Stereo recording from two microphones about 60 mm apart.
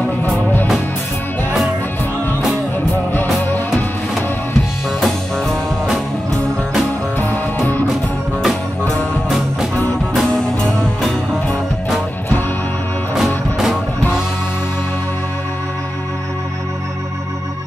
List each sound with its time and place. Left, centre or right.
5.0 s music: centre
10.3 s music: centre